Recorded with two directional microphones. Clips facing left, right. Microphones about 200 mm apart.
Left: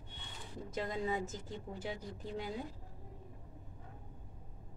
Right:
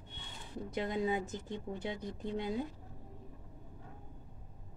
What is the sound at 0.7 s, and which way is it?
A woman's voice, 20° right (ahead or behind).